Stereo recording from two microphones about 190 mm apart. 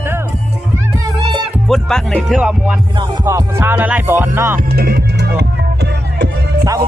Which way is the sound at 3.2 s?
15° right (ahead or behind).